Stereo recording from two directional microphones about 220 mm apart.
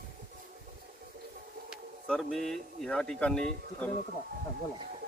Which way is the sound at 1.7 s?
Centre (ahead or behind).